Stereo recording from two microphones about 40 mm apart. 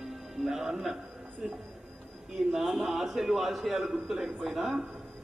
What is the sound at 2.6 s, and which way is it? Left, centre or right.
A man's voice, centre.